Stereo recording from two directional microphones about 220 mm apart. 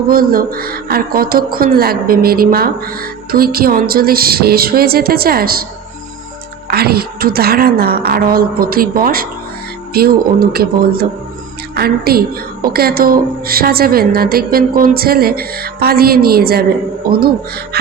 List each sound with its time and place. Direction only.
0.1 s speech: 40° right (ahead or behind)
6.7 s speech: 45° right (ahead or behind)